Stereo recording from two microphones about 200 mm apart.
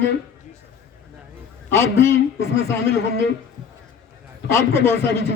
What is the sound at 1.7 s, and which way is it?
Speech, 10° left (ahead or behind).